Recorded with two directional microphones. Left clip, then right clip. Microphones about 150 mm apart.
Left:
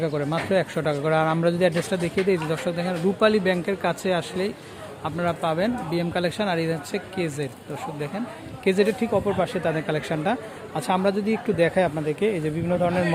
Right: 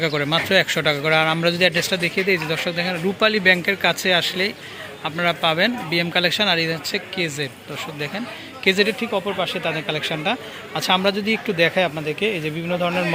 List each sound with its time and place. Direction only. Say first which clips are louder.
0.0 s speech: right 5 dB; 5° left (ahead or behind)
8.6 s speech: right 3 dB; 15° left (ahead or behind)
9.0 s speech: even; 30° left (ahead or behind)
10.8 s speech: right 4 dB; 15° left (ahead or behind)